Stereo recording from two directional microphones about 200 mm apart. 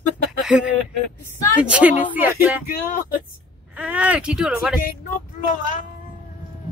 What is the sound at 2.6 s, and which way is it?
Speech, 45° left (ahead or behind).